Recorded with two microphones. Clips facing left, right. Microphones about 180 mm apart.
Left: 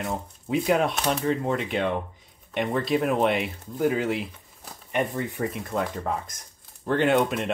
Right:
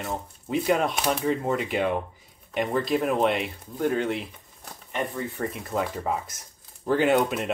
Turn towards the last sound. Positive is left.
turn(degrees=0)  # may be behind; listen again after turning